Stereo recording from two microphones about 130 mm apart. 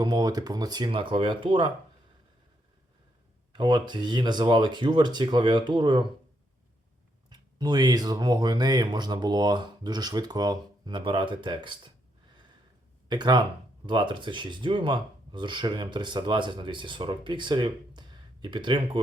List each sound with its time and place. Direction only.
0.0 s speech: 35° right (ahead or behind)
3.5 s speech: 35° right (ahead or behind)
7.3 s speech: 30° right (ahead or behind)
13.1 s speech: 35° right (ahead or behind)